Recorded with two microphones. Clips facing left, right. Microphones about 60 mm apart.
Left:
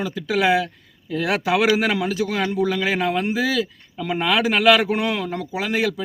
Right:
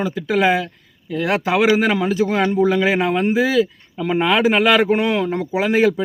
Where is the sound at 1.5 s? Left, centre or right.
Centre.